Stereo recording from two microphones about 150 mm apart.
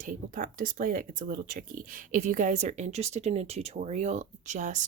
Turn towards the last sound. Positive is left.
turn(degrees=-55)  # may be behind; listen again after turning